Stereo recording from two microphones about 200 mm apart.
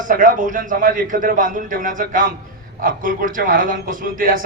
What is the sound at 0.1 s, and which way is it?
A man's voice, 40° right (ahead or behind).